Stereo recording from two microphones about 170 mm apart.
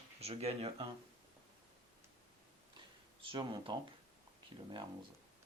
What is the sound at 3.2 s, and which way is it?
Speech, 30° right (ahead or behind).